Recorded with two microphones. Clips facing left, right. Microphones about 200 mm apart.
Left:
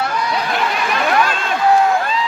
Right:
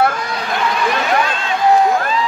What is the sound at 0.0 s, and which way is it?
Chatter, 50° right (ahead or behind).